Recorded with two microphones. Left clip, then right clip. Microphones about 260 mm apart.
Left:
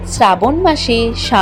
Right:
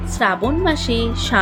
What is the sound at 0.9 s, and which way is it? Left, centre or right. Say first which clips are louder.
Speech: left 6 dB; right.